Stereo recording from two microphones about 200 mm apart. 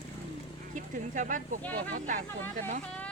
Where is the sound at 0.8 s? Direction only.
40° right (ahead or behind).